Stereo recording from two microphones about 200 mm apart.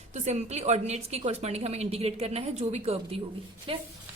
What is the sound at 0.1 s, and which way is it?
A woman's voice, 35° right (ahead or behind).